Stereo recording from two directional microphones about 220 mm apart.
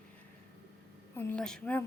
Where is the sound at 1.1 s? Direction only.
5° left (ahead or behind).